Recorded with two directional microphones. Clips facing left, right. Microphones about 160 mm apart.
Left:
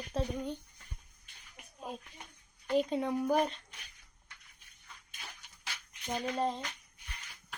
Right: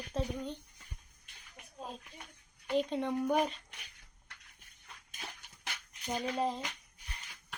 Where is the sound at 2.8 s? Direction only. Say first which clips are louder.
Left 1 dB; 5° left (ahead or behind).